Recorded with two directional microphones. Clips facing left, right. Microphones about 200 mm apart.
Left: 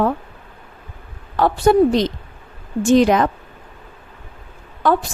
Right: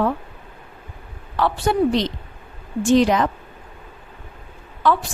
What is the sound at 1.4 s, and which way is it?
A woman's voice, 45° left (ahead or behind).